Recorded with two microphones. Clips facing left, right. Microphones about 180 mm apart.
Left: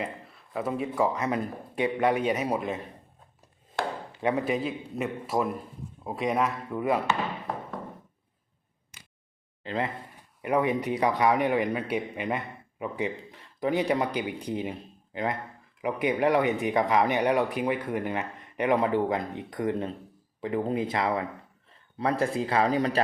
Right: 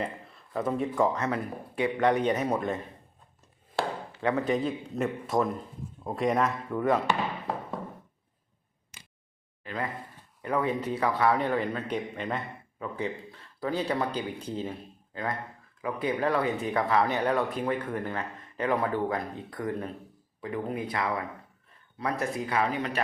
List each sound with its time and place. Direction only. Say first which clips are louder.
0.0 s speech: right 1 dB; 5° left (ahead or behind)
3.8 s chopping: right 1 dB; 15° left (ahead or behind)
4.5 s a man's voice: right 1 dB; 5° left (ahead or behind)
9.6 s speech: left 3 dB; 25° left (ahead or behind)